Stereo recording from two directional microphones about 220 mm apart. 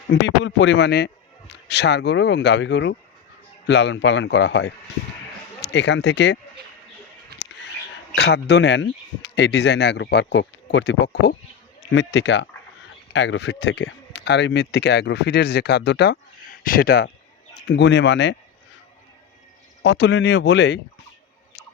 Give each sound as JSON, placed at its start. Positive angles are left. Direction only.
{"t": 0.2, "sound": "speech", "side_deg": 55}
{"t": 7.3, "sound": "a sound", "side_deg": -50}
{"t": 8.1, "sound": "speech", "side_deg": 50}
{"t": 19.8, "sound": "speech", "side_deg": 55}